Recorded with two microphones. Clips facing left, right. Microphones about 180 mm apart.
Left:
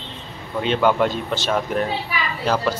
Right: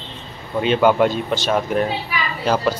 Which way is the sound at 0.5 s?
5° right (ahead or behind).